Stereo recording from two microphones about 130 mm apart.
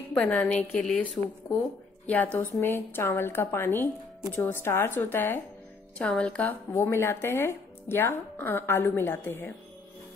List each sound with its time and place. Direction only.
0.1 s speech: 10° left (ahead or behind)